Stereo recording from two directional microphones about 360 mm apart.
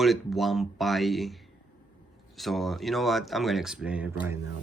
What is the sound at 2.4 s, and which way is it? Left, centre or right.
Speech, centre.